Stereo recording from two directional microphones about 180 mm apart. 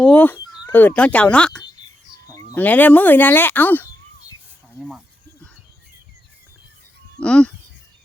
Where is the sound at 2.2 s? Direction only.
20° left (ahead or behind).